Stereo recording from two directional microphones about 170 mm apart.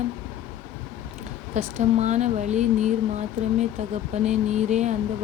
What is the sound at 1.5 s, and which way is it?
Speech, 45° right (ahead or behind).